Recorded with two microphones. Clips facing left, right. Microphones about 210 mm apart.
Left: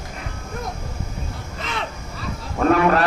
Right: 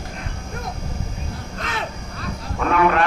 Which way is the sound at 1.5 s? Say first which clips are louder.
Even; centre (ahead or behind).